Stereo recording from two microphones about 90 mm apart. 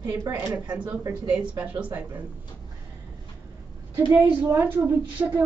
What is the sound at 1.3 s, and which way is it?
Speech, 15° right (ahead or behind).